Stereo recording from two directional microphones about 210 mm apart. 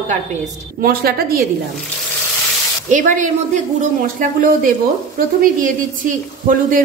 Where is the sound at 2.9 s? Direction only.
40° right (ahead or behind).